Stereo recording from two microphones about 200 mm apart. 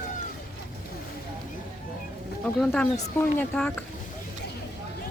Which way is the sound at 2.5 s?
5° left (ahead or behind).